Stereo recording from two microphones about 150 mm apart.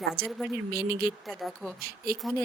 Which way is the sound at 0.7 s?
90° right.